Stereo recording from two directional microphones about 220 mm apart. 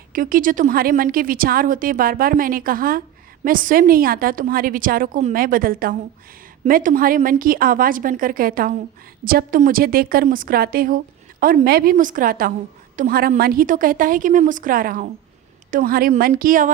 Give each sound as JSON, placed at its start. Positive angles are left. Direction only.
{"t": 0.1, "sound": "a woman's voice", "side_deg": -40}